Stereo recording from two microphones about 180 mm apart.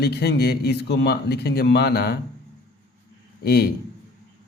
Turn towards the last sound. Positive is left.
turn(degrees=60)  # may be behind; listen again after turning